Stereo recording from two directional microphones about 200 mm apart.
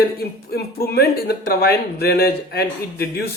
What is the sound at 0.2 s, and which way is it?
Speech, 50° left (ahead or behind).